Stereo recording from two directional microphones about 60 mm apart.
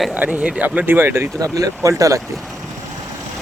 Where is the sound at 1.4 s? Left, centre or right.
Right.